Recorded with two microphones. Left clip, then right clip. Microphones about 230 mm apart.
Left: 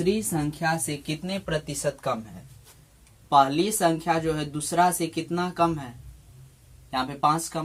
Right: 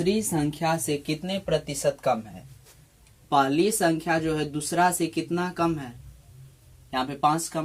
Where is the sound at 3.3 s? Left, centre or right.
Left.